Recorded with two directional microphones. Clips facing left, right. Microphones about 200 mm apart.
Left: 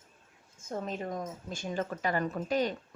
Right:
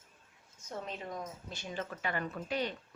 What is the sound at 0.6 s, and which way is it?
A woman's voice, 45° left (ahead or behind).